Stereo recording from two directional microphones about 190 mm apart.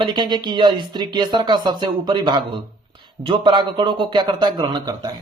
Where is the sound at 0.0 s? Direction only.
25° right (ahead or behind).